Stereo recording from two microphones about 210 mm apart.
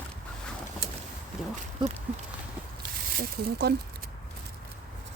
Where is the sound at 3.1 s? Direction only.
45° right (ahead or behind).